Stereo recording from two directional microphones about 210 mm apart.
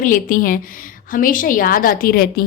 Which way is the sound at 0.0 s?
40° left (ahead or behind).